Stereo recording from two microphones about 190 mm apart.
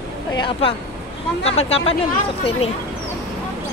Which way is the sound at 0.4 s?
25° left (ahead or behind).